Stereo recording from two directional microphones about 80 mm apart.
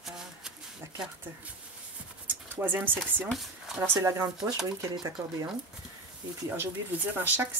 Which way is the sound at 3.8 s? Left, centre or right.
Right.